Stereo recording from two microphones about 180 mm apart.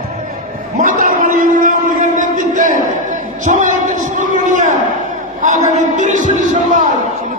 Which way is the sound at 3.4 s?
45° right (ahead or behind).